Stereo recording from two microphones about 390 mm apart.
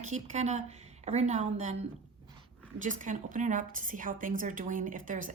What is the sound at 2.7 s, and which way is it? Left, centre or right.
A woman's voice, centre.